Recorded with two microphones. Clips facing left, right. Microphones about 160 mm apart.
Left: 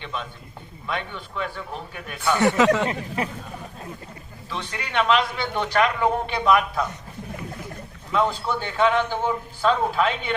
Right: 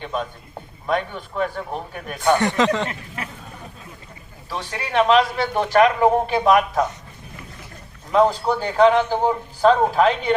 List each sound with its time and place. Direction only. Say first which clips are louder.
0.0 s a man's voice: right 6 dB; 45° right (ahead or behind)
2.4 s speech: left 1 dB; 10° left (ahead or behind)
4.4 s a man's voice: right 3 dB; 35° right (ahead or behind)
8.1 s a man's voice: right 6 dB; 40° right (ahead or behind)